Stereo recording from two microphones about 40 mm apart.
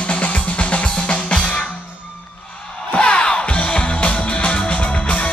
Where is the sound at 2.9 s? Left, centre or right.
Left.